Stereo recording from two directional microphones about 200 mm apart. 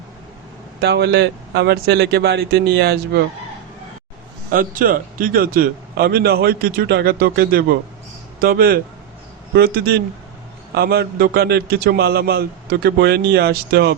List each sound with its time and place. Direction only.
0.8 s speech: 55° right (ahead or behind)
4.5 s a man's voice: 45° right (ahead or behind)